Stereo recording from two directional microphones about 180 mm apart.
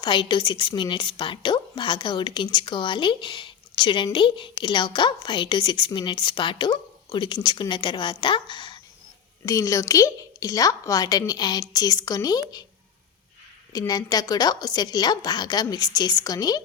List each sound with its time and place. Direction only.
0.0 s a woman's voice: 25° left (ahead or behind)
13.7 s a woman's voice: 20° left (ahead or behind)